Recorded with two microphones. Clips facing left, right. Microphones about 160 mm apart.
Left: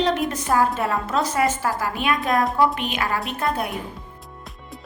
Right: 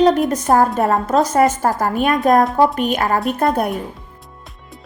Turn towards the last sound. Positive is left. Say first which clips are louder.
# right 8 dB
turn(degrees=-45)  # may be behind; listen again after turning